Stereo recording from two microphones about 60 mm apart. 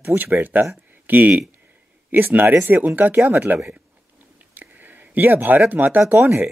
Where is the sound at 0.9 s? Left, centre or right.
Right.